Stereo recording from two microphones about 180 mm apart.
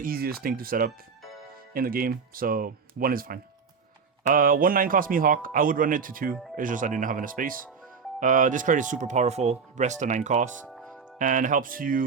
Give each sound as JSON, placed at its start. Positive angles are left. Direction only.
{"t": 0.0, "sound": "speech", "side_deg": -55}
{"t": 10.7, "sound": "music", "side_deg": 0}
{"t": 11.2, "sound": "speech", "side_deg": -45}